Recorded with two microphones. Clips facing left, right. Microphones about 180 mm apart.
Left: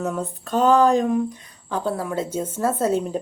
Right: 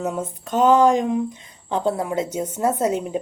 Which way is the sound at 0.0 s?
20° right (ahead or behind).